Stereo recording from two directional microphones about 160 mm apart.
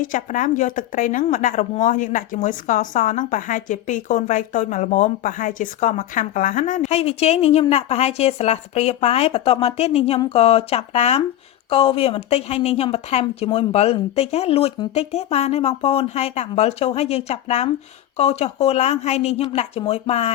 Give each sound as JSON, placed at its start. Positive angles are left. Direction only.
{"t": 0.0, "sound": "a woman's voice", "side_deg": 55}